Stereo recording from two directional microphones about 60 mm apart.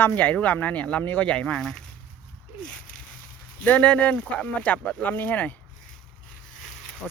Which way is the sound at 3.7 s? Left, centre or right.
Left.